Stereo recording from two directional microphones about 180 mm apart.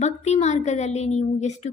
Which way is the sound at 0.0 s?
40° left (ahead or behind).